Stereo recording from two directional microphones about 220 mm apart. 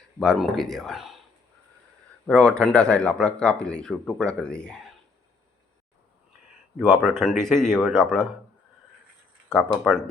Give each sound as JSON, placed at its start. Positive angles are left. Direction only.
{"t": 0.2, "sound": "speech", "side_deg": 0}
{"t": 2.2, "sound": "speech", "side_deg": 5}
{"t": 6.7, "sound": "speech", "side_deg": 0}
{"t": 9.5, "sound": "speech", "side_deg": 5}